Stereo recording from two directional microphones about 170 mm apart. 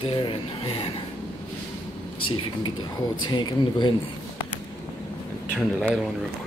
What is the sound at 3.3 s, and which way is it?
Speech, 25° left (ahead or behind).